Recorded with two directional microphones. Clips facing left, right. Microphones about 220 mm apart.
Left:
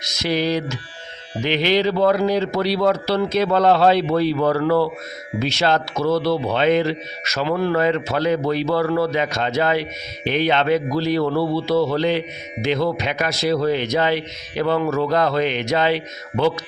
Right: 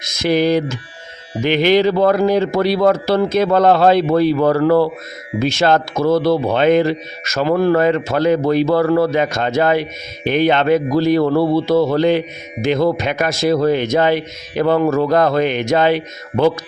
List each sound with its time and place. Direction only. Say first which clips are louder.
0.0 s a man's voice: right 6 dB; 50° right (ahead or behind)